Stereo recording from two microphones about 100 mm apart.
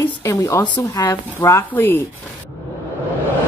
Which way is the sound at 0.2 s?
35° left (ahead or behind).